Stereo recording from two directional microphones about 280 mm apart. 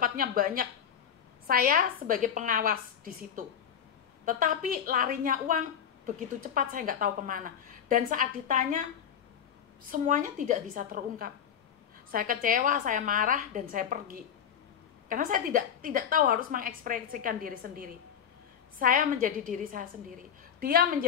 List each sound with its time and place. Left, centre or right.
0.0 s a woman's voice: right
9.8 s a woman's voice: right